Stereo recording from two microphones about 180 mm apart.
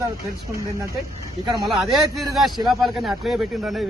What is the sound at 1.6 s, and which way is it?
Speech, centre (ahead or behind).